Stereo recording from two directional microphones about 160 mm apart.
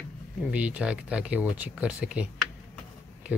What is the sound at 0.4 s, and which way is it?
Speech, 10° right (ahead or behind).